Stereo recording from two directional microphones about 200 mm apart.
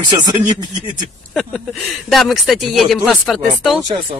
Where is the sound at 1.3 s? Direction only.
Centre (ahead or behind).